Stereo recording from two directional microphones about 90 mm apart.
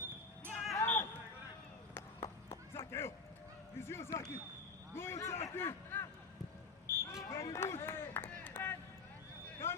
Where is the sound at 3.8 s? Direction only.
30° left (ahead or behind).